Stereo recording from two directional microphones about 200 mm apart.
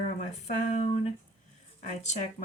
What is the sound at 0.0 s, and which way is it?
Speech, 35° left (ahead or behind).